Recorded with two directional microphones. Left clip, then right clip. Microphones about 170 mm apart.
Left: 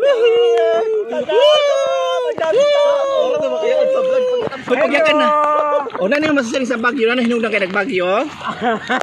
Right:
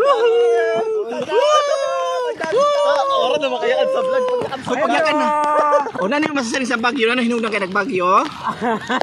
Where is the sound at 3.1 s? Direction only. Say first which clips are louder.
Left 1 dB; 20° left (ahead or behind).